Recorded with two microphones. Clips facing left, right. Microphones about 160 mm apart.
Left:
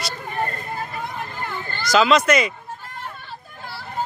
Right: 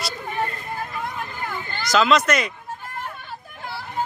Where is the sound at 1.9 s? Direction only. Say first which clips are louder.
Left 2 dB; centre (ahead or behind).